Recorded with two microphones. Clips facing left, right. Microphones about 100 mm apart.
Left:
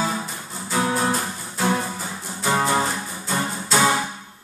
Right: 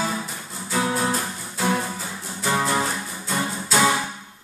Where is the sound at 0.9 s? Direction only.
10° left (ahead or behind).